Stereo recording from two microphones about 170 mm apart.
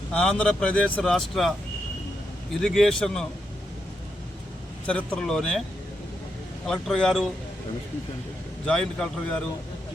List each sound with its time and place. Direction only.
0.1 s speech: 5° left (ahead or behind)
4.9 s speech: 5° left (ahead or behind)
6.7 s speech: 5° left (ahead or behind)
8.6 s speech: 5° left (ahead or behind)